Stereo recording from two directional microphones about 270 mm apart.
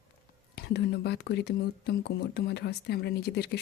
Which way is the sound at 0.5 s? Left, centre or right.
Left.